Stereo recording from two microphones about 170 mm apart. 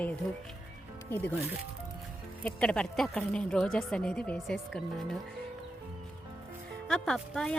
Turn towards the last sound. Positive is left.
turn(degrees=0)  # may be behind; listen again after turning